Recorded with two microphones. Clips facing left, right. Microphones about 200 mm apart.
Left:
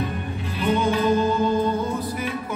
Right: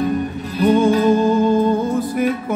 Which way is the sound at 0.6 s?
40° right (ahead or behind).